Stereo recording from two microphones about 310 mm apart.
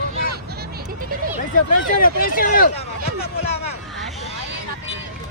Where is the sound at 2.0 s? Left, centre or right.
Left.